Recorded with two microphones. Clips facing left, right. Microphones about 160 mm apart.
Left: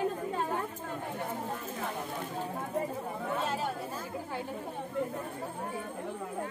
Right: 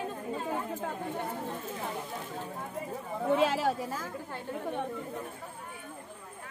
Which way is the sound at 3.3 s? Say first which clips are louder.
Right 7 dB; 90° right.